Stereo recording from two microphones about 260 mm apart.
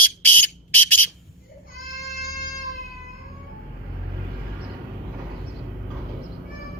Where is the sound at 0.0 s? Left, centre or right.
Centre.